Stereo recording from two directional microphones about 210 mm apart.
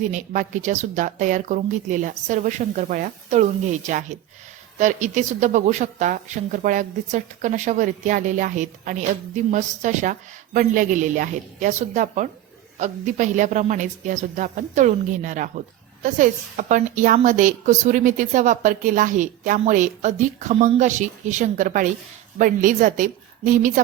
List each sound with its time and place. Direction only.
0.1 s speech: 35° right (ahead or behind)